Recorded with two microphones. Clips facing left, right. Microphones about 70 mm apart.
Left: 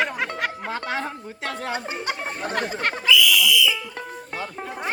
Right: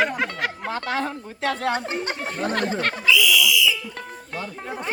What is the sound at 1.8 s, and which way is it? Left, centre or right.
Speech, left.